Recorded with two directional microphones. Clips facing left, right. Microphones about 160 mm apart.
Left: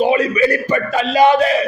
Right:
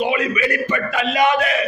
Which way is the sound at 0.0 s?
35° left (ahead or behind).